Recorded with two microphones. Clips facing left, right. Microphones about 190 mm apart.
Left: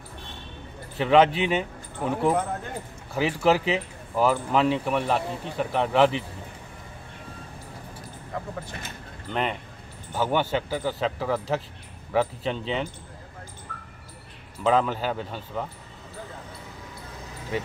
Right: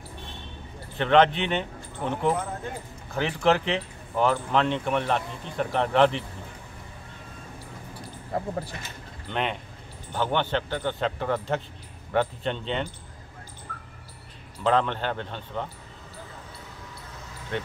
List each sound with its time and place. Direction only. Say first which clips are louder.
0.9 s speech: left 1 dB; 5° left (ahead or behind)
8.3 s speech: right 5 dB; 35° right (ahead or behind)
9.3 s speech: left 1 dB; centre (ahead or behind)
14.6 s speech: left 1 dB; 5° left (ahead or behind)